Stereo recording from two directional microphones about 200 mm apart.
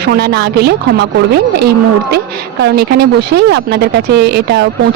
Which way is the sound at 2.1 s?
55° right (ahead or behind).